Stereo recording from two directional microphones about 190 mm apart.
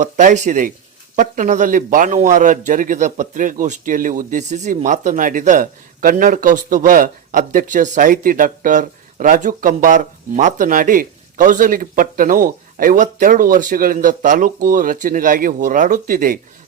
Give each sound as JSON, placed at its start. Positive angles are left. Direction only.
{"t": 0.0, "sound": "speech", "side_deg": -40}